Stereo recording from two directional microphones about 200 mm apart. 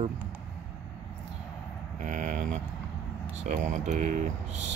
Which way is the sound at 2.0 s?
40° right (ahead or behind).